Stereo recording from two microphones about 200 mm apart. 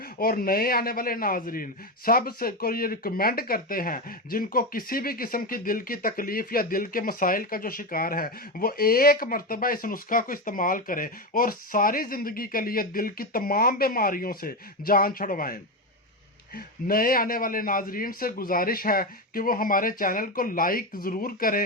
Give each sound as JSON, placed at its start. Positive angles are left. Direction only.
{"t": 0.2, "sound": "a man's voice", "side_deg": 45}
{"t": 16.6, "sound": "a man's voice", "side_deg": 45}